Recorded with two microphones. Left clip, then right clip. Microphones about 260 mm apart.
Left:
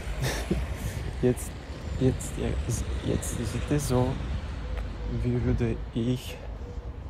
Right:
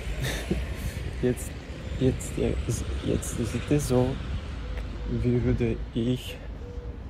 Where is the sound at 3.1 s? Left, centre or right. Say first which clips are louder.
Right 2 dB; left.